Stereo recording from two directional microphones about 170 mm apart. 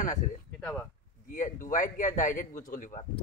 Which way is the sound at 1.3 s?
50° left (ahead or behind).